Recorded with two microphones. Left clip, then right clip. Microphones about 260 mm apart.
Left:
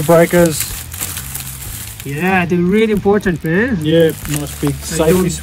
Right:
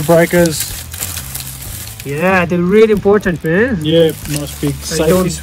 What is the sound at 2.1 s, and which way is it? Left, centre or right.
Speech, centre.